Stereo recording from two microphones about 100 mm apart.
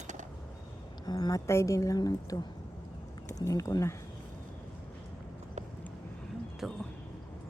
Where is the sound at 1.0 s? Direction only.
40° left (ahead or behind).